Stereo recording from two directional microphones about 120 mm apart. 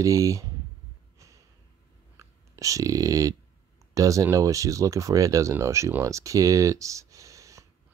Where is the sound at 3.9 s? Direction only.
30° right (ahead or behind).